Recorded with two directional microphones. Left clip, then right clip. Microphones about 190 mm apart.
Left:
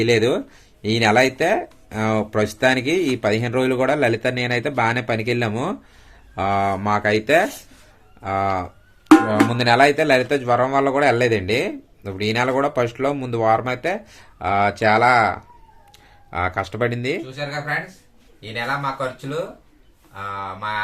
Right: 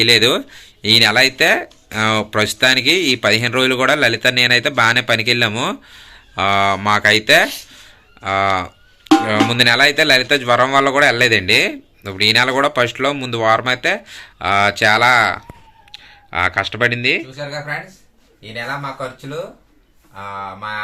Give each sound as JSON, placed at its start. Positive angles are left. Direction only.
{"t": 0.0, "sound": "speech", "side_deg": 0}
{"t": 18.5, "sound": "speech", "side_deg": 10}